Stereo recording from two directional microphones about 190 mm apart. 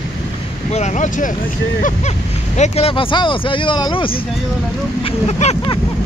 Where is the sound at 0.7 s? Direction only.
35° left (ahead or behind).